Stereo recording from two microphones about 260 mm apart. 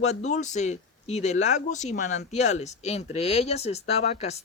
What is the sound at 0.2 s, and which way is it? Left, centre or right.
Speech, left.